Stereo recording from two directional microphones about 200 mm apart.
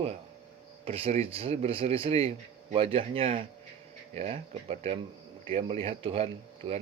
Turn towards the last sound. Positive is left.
turn(degrees=-30)  # may be behind; listen again after turning